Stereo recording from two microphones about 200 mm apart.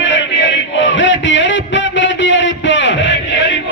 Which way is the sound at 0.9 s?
65° left (ahead or behind).